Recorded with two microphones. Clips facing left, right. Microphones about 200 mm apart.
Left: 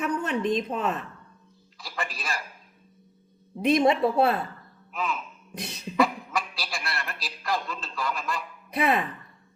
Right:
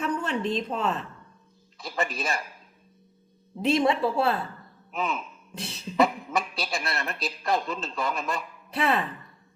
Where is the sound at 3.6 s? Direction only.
20° left (ahead or behind).